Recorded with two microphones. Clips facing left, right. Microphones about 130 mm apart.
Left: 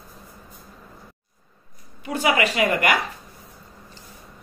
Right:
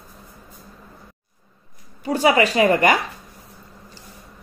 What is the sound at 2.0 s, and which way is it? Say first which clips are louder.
Speech: right 4 dB; 30° right (ahead or behind).